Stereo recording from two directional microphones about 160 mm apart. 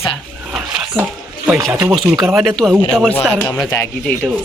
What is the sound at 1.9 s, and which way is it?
Speech, centre (ahead or behind).